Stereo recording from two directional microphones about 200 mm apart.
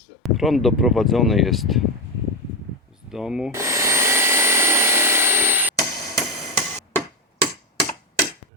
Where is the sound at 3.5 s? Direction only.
15° right (ahead or behind).